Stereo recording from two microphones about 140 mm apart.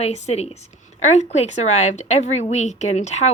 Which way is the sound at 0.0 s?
50° left (ahead or behind).